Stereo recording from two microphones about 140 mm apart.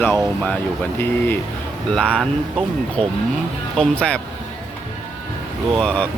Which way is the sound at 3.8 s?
10° left (ahead or behind).